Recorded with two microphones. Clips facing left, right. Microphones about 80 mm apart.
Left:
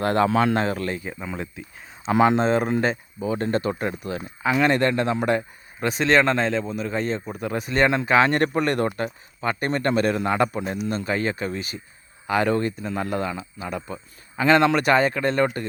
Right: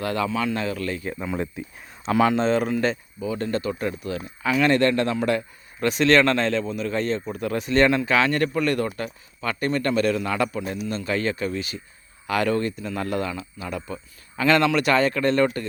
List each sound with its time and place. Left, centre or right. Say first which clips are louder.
0.0 s speech: left 5 dB; left
1.0 s speech: right 4 dB; centre
2.1 s speech: left 1 dB; centre
2.6 s speech: left 1 dB; left; by 7.9 s centre
7.9 s speech: left 2 dB; left
15.0 s speech: right 1 dB; centre